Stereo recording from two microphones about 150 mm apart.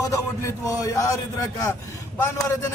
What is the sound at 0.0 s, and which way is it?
A man's voice, 20° left (ahead or behind).